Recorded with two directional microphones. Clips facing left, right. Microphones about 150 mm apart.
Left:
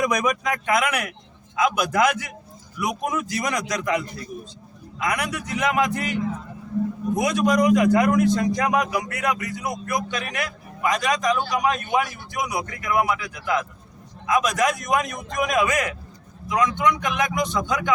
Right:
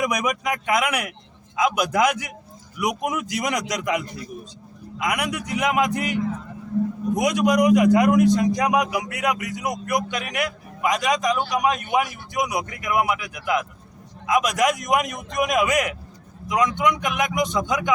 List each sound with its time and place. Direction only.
0.0 s a man's voice: 15° right (ahead or behind)
7.2 s a man's voice: 15° right (ahead or behind)